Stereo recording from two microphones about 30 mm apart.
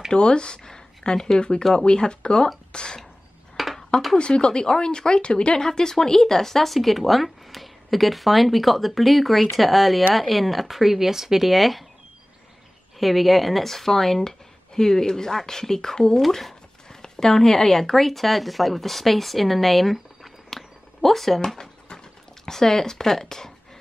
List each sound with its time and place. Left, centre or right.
0.1 s speech: left
0.6 s speech: left
1.9 s speech: left
3.5 s a sound: centre
4.2 s speech: left
5.6 s speech: centre
13.0 s speech: centre
16.2 s zipper: centre
17.0 s speech: centre
21.9 s a sound: centre
23.2 s speech: centre